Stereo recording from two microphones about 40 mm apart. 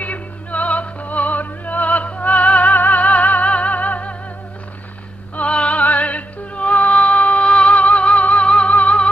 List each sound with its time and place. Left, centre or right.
0.0 s music: left
5.3 s music: left